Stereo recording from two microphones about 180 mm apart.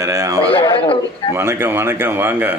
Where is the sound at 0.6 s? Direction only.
30° left (ahead or behind).